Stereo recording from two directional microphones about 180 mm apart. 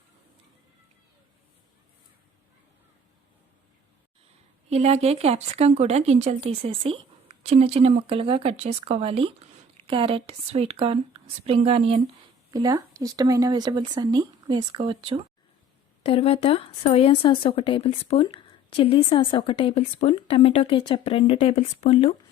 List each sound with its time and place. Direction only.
4.7 s speech: 35° right (ahead or behind)
12.5 s speech: 20° right (ahead or behind)
16.0 s a woman's voice: 30° left (ahead or behind)